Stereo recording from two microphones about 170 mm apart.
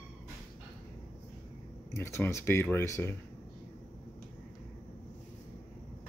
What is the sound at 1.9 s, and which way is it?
Speech, 15° left (ahead or behind).